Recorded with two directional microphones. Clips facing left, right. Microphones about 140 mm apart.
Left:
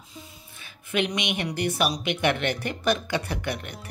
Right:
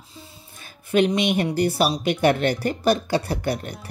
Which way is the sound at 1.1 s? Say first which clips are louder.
Right 8 dB; 35° right (ahead or behind).